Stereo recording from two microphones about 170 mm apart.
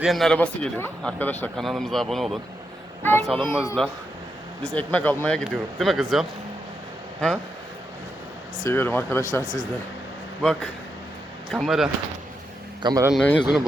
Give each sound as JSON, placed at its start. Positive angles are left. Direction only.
{"t": 0.0, "sound": "a man's voice", "side_deg": 0}
{"t": 3.0, "sound": "a man's voice", "side_deg": 10}
{"t": 4.7, "sound": "a man's voice", "side_deg": 10}
{"t": 8.6, "sound": "speech", "side_deg": 15}
{"t": 10.4, "sound": "a man's voice", "side_deg": 5}
{"t": 12.8, "sound": "speech", "side_deg": -20}
{"t": 13.1, "sound": "a man's voice", "side_deg": 5}